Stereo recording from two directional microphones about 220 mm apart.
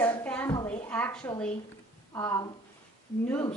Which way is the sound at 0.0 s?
5° left (ahead or behind).